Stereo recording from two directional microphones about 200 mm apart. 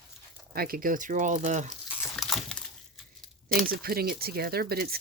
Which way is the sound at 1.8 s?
Centre (ahead or behind).